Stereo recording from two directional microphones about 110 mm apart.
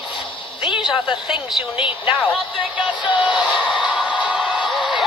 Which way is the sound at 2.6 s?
15° right (ahead or behind).